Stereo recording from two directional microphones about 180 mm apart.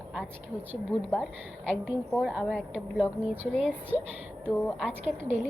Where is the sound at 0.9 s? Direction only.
20° left (ahead or behind).